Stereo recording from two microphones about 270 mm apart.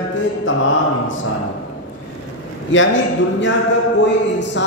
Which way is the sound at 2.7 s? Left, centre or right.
Left.